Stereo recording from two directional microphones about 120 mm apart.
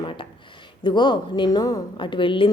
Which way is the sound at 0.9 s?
40° left (ahead or behind).